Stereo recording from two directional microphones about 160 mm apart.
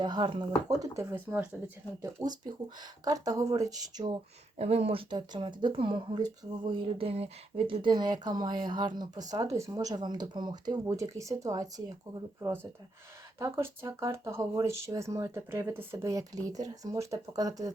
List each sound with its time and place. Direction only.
0.0 s speech: 30° right (ahead or behind)
0.9 s speech: 15° right (ahead or behind)
2.2 s speech: 25° right (ahead or behind)
4.5 s speech: 40° right (ahead or behind); by 11.7 s 20° right (ahead or behind)
13.4 s speech: 20° right (ahead or behind)